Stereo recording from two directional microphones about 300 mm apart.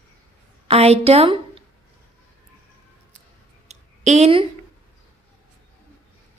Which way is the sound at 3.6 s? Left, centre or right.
Right.